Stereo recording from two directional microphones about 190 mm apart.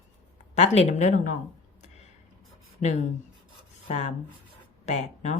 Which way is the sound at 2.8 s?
35° left (ahead or behind).